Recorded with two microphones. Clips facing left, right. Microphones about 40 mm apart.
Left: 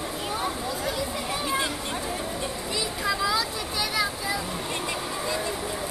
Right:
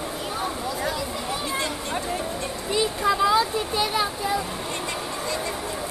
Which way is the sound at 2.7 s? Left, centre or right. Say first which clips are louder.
Right 7 dB; right.